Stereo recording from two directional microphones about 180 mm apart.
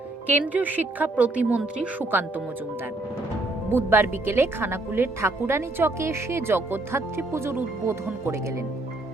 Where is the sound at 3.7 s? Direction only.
10° right (ahead or behind).